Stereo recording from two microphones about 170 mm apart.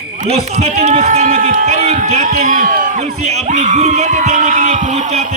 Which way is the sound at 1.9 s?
40° right (ahead or behind).